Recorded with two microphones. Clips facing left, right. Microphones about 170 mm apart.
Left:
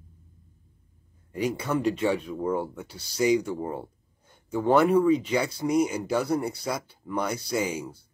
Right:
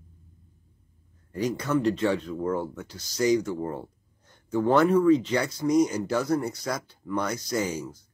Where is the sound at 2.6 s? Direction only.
25° left (ahead or behind).